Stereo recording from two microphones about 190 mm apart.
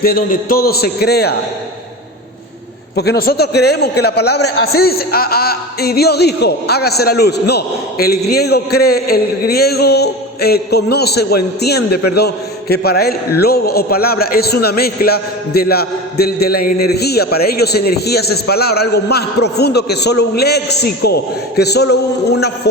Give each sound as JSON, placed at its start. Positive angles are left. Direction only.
{"t": 0.0, "sound": "a man's voice", "side_deg": 50}
{"t": 2.9, "sound": "a man's voice", "side_deg": 60}